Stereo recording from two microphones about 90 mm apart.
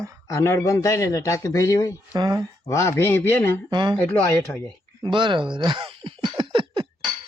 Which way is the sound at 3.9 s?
15° left (ahead or behind).